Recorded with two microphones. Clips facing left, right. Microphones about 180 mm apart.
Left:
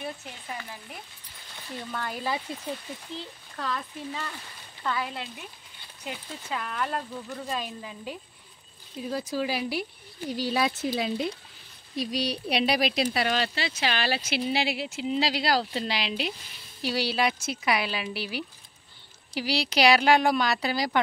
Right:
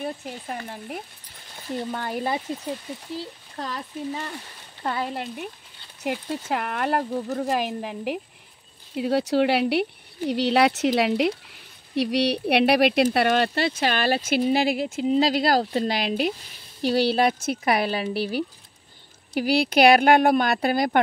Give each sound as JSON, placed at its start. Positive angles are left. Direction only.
{"t": 0.5, "sound": "speech", "side_deg": -50}
{"t": 1.8, "sound": "speech", "side_deg": -30}
{"t": 3.5, "sound": "speech", "side_deg": -35}
{"t": 5.1, "sound": "speech", "side_deg": -55}
{"t": 6.0, "sound": "speech", "side_deg": -65}
{"t": 7.4, "sound": "speech", "side_deg": -70}